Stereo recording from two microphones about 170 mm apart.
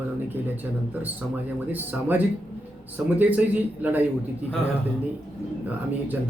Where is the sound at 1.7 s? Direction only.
10° right (ahead or behind).